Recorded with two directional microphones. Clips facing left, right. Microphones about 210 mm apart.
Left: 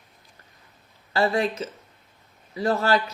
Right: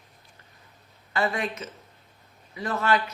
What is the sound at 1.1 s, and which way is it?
Speech, 30° left (ahead or behind).